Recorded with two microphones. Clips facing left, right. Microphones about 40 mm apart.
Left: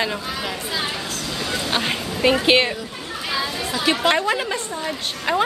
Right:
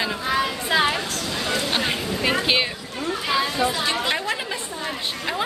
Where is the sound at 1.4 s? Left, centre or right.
Centre.